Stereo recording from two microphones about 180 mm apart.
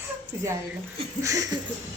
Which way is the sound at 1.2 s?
15° right (ahead or behind).